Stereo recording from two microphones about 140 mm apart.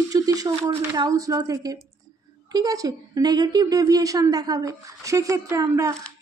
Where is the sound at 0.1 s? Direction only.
25° right (ahead or behind).